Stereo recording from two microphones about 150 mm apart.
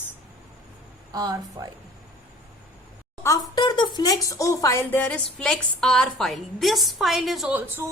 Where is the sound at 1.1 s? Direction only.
25° right (ahead or behind).